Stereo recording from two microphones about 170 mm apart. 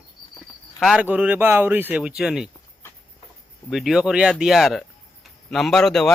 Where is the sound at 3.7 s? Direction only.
Centre (ahead or behind).